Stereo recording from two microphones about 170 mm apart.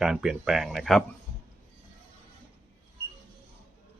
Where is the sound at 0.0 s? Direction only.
5° right (ahead or behind).